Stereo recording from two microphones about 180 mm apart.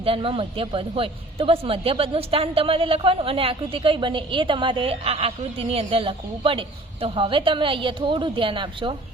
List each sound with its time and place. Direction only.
0.0 s speech: 30° right (ahead or behind)